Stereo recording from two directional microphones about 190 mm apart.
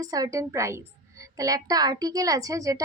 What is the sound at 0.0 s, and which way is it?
A woman's voice, 20° right (ahead or behind).